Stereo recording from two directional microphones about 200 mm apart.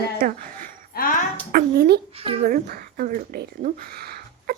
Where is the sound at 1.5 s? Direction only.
50° right (ahead or behind).